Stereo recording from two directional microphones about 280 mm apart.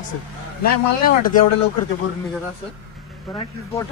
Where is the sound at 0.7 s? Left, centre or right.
Left.